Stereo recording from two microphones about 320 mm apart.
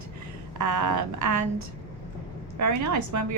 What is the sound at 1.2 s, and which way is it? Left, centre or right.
A woman's voice, right.